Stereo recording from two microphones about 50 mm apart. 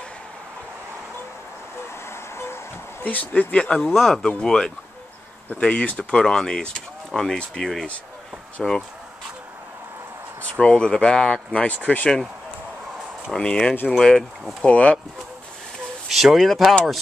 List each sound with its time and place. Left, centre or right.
2.0 s music: left
3.1 s speech: left
3.5 s speech: centre
10.4 s speech: left
13.4 s speech: centre
14.6 s speech: left
16.1 s speech: centre